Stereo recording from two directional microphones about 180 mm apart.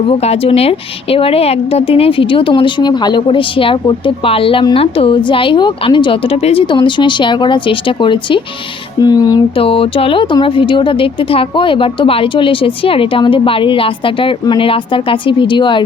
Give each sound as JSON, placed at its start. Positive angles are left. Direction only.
{"t": 0.1, "sound": "speech", "side_deg": 35}